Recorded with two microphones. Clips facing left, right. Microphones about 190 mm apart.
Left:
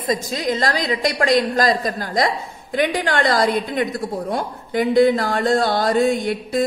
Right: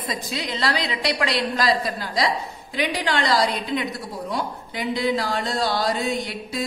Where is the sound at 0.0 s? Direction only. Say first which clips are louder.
Left 7 dB; 45° left (ahead or behind).